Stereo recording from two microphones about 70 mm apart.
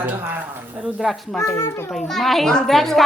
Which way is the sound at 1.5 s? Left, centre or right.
Left.